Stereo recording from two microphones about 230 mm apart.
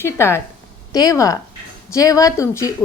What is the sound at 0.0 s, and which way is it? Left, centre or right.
A woman's voice, centre.